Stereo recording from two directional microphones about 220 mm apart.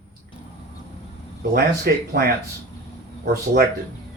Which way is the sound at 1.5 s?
45° right (ahead or behind).